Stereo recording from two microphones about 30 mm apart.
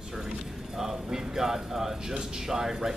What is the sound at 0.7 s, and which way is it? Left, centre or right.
Speech, centre.